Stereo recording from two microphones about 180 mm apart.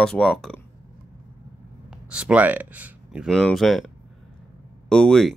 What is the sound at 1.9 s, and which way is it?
Speech, 5° right (ahead or behind).